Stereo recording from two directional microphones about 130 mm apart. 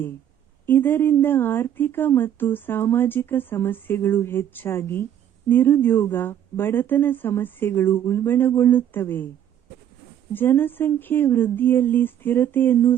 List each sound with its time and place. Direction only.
0.6 s speech: 15° left (ahead or behind)
10.3 s speech: 15° left (ahead or behind)